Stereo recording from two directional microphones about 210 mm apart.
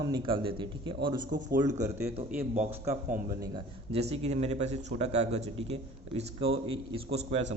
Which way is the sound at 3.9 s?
30° right (ahead or behind).